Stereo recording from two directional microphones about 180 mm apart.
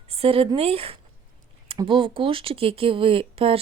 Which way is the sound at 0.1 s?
30° right (ahead or behind).